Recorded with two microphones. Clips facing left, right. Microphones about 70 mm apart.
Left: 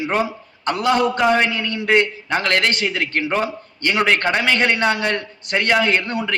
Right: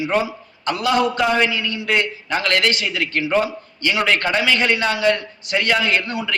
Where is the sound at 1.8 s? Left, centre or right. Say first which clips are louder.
Left 5 dB; left.